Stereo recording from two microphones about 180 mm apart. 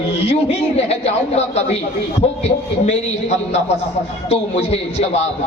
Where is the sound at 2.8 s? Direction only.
40° left (ahead or behind).